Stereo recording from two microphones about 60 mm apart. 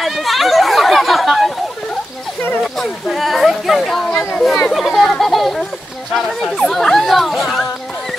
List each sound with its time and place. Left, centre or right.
0.0 s chatter: centre
2.6 s a sound: centre
6.1 s speech: centre